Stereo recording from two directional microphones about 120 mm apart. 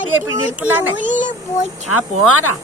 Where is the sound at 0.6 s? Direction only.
15° right (ahead or behind).